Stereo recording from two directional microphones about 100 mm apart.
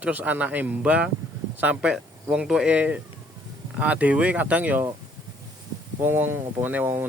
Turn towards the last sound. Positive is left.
turn(degrees=-20)  # may be behind; listen again after turning